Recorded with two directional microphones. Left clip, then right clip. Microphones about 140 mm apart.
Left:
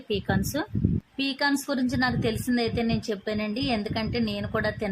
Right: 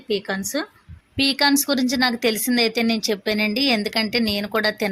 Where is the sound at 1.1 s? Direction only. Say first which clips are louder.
Right 9 dB; 35° right (ahead or behind).